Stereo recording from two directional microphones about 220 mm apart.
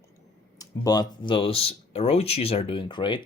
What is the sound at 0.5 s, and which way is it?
Speech, 15° left (ahead or behind).